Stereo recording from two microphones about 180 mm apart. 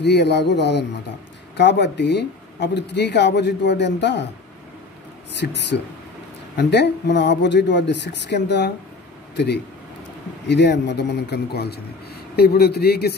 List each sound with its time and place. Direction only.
0.0 s speech: 70° left (ahead or behind)
5.4 s speech: 70° left (ahead or behind)
10.4 s speech: 70° left (ahead or behind)